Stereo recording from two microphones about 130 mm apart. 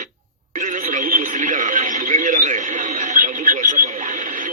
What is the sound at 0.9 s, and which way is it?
Radio, 85° right.